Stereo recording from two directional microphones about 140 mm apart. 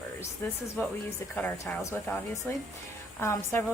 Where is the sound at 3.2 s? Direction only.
20° left (ahead or behind).